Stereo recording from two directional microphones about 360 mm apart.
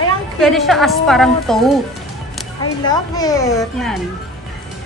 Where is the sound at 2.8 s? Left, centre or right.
Centre.